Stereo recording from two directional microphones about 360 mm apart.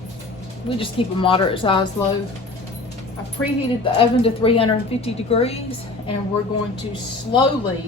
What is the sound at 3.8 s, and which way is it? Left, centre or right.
A woman's voice, centre.